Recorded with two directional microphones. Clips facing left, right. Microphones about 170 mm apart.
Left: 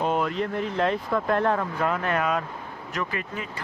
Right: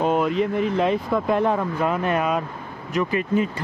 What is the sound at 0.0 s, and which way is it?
Speech, 15° right (ahead or behind).